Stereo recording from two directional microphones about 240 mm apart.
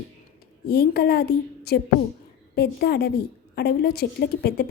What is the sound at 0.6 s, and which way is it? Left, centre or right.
A woman's voice, left.